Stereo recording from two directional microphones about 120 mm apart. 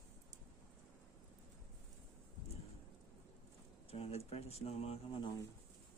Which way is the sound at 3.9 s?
55° left (ahead or behind).